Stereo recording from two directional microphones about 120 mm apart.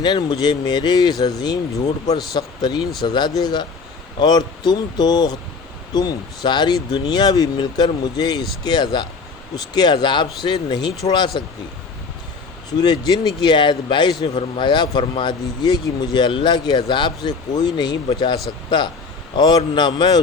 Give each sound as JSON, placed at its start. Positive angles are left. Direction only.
{"t": 0.0, "sound": "speech", "side_deg": 35}
{"t": 12.7, "sound": "speech", "side_deg": 35}
{"t": 19.4, "sound": "speech", "side_deg": 35}